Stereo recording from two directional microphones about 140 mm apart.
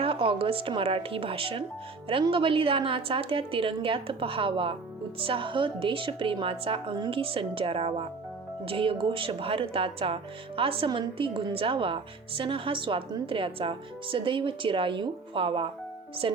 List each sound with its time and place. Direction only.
0.0 s a woman's voice: 40° right (ahead or behind)